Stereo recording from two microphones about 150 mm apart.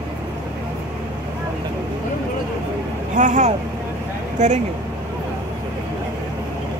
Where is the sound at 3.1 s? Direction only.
55° right (ahead or behind).